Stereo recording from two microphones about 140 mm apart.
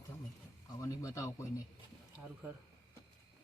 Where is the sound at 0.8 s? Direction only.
20° left (ahead or behind).